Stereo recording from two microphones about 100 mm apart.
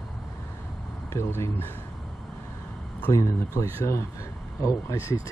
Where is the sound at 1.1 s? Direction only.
25° left (ahead or behind).